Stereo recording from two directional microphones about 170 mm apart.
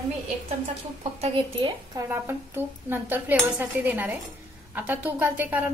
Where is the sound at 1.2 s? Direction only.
30° right (ahead or behind).